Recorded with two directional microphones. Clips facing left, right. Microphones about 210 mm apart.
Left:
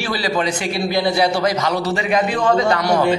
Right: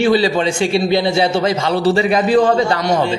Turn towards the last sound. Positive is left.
turn(degrees=-30)  # may be behind; listen again after turning